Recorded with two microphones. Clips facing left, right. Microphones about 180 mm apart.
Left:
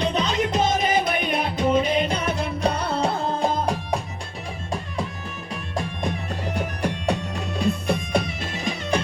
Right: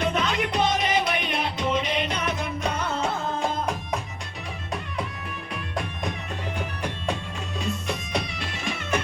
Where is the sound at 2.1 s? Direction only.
35° left (ahead or behind).